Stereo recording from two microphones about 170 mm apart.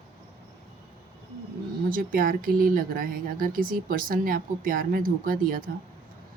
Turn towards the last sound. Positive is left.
turn(degrees=-55)  # may be behind; listen again after turning